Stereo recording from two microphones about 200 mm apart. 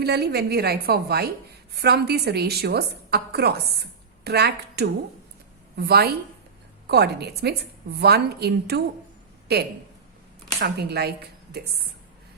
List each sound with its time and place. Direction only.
0.0 s a woman's voice: 55° right (ahead or behind)
10.6 s speech: 55° right (ahead or behind)